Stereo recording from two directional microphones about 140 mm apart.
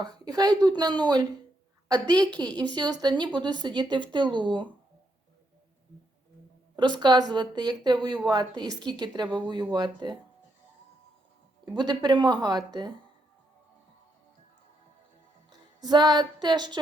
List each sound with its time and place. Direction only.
0.0 s speech: 30° right (ahead or behind)
6.7 s speech: 30° right (ahead or behind)
11.6 s speech: 30° right (ahead or behind)
15.8 s speech: 30° right (ahead or behind)